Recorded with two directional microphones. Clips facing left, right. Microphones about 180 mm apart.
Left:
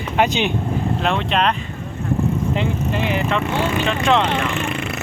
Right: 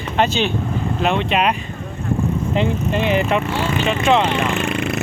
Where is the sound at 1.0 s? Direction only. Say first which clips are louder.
Right 3 dB; 5° right (ahead or behind).